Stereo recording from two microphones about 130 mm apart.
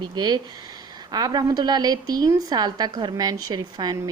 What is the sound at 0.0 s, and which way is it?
A woman's voice, 35° right (ahead or behind).